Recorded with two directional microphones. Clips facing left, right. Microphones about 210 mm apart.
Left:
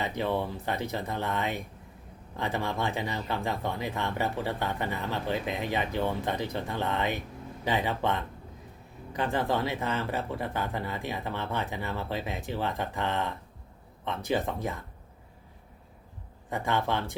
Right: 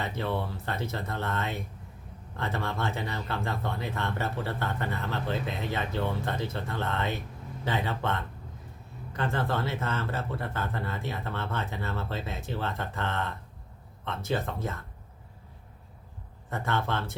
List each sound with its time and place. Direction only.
0.0 s speech: 15° left (ahead or behind)
16.5 s speech: 15° left (ahead or behind)